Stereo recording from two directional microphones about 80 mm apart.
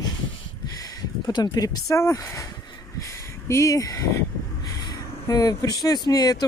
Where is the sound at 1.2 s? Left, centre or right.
Left.